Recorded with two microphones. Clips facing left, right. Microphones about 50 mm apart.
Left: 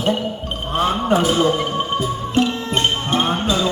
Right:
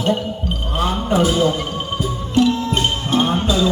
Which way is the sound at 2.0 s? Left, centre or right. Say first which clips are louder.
Right 4 dB; left.